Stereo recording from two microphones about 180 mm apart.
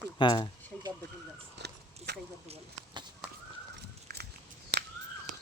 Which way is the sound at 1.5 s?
65° right (ahead or behind).